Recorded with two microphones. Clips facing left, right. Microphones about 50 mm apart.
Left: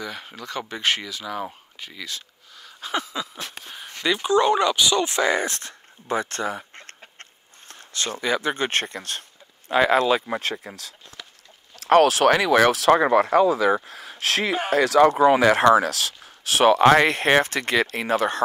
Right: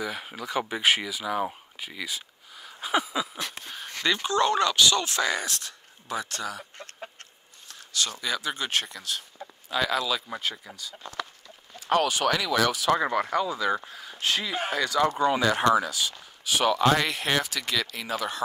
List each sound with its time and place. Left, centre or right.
0.0 s speech: centre
3.7 s speech: centre; by 7.0 s left
7.2 s a sound: left
9.7 s speech: left
10.4 s speech: left
11.9 s speech: left
13.8 s speech: left
14.7 s speech: left
16.7 s speech: left